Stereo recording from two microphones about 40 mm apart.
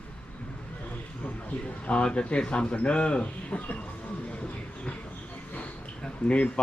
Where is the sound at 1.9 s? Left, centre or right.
Left.